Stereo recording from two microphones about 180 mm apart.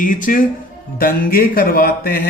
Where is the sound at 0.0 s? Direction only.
50° left (ahead or behind).